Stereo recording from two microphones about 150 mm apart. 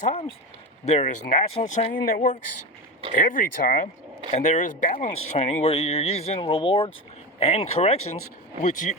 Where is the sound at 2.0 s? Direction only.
80° left.